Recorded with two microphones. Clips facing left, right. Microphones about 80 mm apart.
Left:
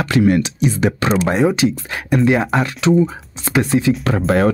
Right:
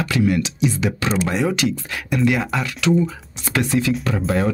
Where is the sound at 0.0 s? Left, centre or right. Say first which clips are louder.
Left 5 dB; left.